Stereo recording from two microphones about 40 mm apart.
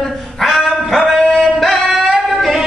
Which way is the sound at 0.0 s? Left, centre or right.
Centre.